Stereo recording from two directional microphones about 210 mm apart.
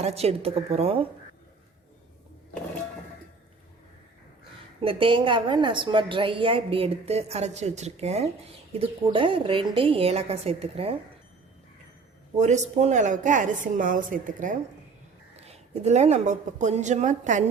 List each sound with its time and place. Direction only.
0.0 s a woman's voice: 30° right (ahead or behind)
4.8 s a woman's voice: 25° right (ahead or behind)
12.4 s a woman's voice: 35° right (ahead or behind)